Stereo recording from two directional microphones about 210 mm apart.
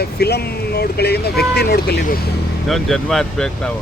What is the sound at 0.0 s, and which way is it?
Speech, 50° left (ahead or behind).